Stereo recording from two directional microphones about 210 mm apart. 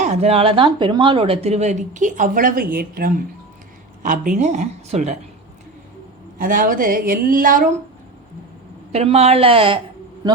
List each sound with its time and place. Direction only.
0.0 s a woman's voice: 30° right (ahead or behind)
6.4 s a woman's voice: 40° right (ahead or behind)
8.9 s a woman's voice: 30° right (ahead or behind)